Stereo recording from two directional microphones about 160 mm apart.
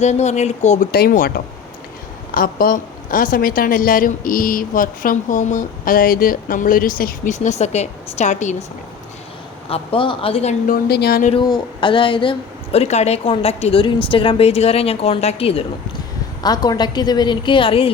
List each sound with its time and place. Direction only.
0.0 s speech: 45° left (ahead or behind)
0.9 s speech: 70° left (ahead or behind)
2.3 s a woman's voice: 65° left (ahead or behind); by 8.6 s 50° left (ahead or behind)
9.6 s a woman's voice: 35° left (ahead or behind)
10.7 s a woman's voice: 90° left
11.3 s a woman's voice: 30° left (ahead or behind)
16.4 s a woman's voice: 25° left (ahead or behind)